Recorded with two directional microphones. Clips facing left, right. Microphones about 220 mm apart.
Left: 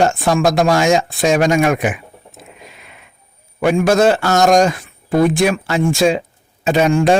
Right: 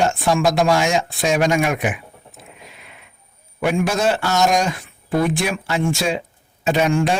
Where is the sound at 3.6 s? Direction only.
45° left (ahead or behind).